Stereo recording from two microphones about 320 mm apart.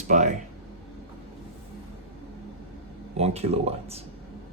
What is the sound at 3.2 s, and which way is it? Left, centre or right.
Speech, centre.